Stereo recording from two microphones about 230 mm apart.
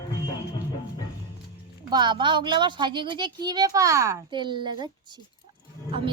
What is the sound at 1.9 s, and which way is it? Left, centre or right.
Speech, centre.